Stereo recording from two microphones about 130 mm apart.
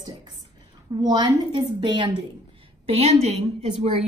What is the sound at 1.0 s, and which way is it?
A woman's voice, 30° right (ahead or behind).